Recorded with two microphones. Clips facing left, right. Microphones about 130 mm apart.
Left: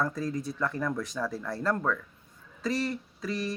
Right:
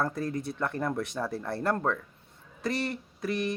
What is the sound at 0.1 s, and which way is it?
Speech, 60° right (ahead or behind).